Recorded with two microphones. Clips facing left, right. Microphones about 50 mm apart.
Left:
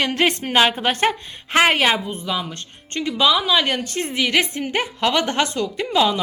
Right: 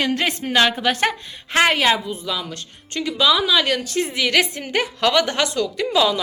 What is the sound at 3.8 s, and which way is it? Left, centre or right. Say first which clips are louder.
A woman's voice: right 1 dB; left.